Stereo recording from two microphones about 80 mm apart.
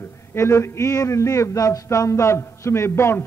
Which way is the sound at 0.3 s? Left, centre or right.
Left.